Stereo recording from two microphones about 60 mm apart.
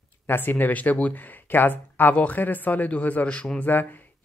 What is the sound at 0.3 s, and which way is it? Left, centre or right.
Speech, left.